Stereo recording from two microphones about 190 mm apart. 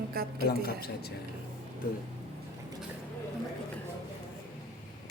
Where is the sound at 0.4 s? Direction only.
55° left (ahead or behind).